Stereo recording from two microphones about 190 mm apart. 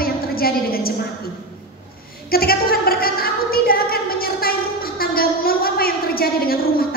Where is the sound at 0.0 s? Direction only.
50° left (ahead or behind).